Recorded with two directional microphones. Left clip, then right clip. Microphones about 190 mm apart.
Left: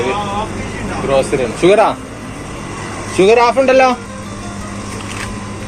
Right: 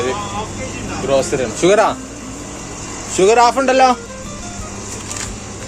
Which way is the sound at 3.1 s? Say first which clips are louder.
Left 2 dB; 20° right (ahead or behind).